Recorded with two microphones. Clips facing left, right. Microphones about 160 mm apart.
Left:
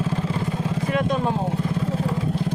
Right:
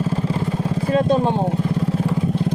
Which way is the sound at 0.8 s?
30° right (ahead or behind).